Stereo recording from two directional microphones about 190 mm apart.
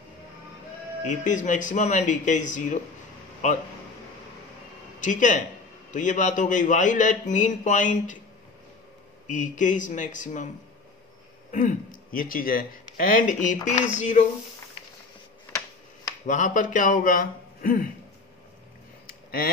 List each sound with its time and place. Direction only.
1.2 s speech: 40° left (ahead or behind)
5.0 s speech: 40° left (ahead or behind)
9.3 s speech: 40° left (ahead or behind)
11.5 s speech: 45° left (ahead or behind)
16.3 s speech: 40° left (ahead or behind)
19.0 s a sound: 50° left (ahead or behind)